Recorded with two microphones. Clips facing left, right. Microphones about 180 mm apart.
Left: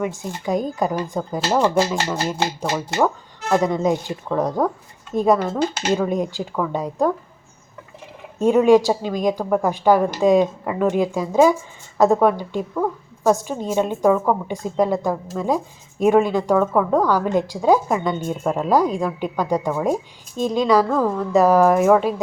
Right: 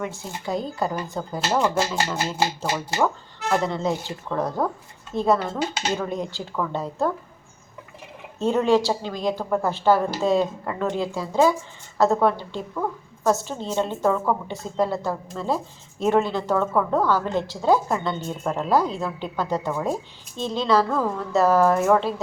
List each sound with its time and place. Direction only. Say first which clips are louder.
0.0 s speech: left 5 dB; 15° left (ahead or behind)
3.5 s speech: left 5 dB; 15° left (ahead or behind)
5.4 s speech: left 5 dB; centre (ahead or behind)
5.9 s speech: left 6 dB; 15° left (ahead or behind)
8.4 s speech: left 6 dB; 15° left (ahead or behind)